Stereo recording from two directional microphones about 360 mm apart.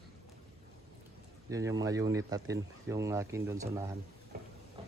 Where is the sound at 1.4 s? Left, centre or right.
Centre.